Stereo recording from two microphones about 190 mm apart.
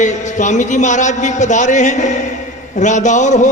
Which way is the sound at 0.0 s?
40° left (ahead or behind).